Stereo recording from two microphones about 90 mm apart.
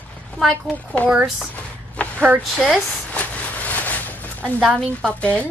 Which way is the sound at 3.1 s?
15° left (ahead or behind).